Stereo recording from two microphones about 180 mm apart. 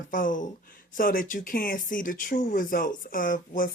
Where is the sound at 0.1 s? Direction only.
50° left (ahead or behind).